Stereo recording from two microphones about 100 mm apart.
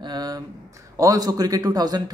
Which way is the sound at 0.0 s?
40° right (ahead or behind).